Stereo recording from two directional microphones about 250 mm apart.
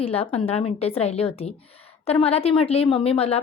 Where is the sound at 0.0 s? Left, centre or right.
Left.